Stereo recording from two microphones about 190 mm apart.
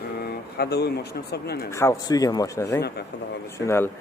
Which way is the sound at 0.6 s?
60° left (ahead or behind).